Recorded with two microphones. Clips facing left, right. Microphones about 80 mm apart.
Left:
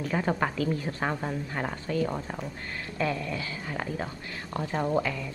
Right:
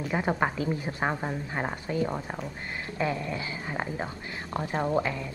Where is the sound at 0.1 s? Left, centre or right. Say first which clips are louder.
Right 1 dB; centre.